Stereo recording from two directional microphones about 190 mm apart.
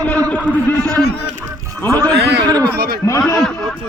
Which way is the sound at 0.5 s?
10° left (ahead or behind).